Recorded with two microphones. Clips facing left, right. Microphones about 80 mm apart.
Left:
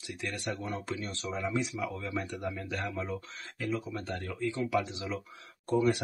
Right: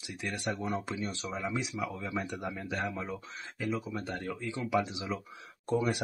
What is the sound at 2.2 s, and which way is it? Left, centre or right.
Speech, centre.